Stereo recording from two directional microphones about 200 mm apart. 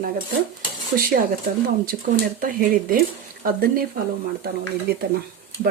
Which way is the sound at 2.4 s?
45° right (ahead or behind).